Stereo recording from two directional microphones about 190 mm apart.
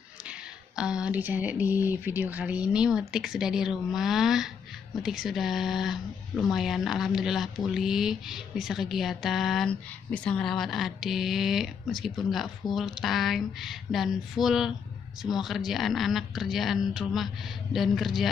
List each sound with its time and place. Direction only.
0.3 s speech: 5° right (ahead or behind)